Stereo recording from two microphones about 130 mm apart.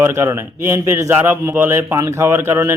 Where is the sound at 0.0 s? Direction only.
20° right (ahead or behind).